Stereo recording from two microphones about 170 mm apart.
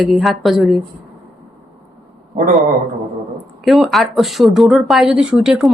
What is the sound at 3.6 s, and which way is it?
Speech, centre (ahead or behind).